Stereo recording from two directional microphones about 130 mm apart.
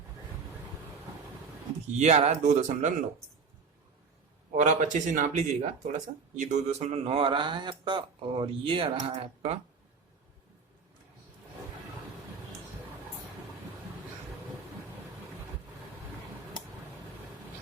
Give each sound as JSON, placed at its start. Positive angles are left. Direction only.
{"t": 2.0, "sound": "speech", "side_deg": -60}
{"t": 4.5, "sound": "speech", "side_deg": -75}